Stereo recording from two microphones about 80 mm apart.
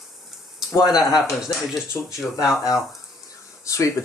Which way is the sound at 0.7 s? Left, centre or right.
Left.